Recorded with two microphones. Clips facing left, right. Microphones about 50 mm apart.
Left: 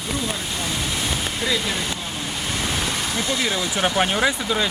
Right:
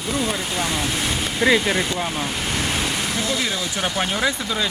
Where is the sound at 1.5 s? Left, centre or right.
Right.